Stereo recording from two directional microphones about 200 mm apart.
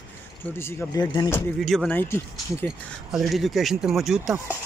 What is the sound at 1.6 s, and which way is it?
Speech, centre (ahead or behind).